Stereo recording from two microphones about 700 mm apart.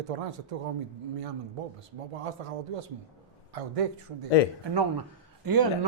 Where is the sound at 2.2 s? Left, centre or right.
Right.